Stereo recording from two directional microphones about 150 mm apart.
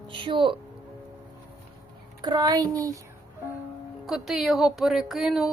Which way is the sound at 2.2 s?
30° right (ahead or behind).